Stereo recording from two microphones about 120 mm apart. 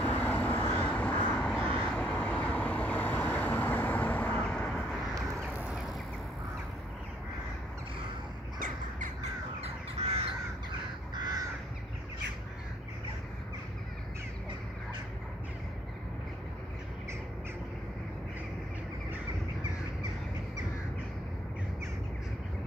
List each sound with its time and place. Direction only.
0.0 s vehicle: 15° left (ahead or behind)
9.0 s crow: 65° right (ahead or behind)
11.1 s crow: 35° right (ahead or behind)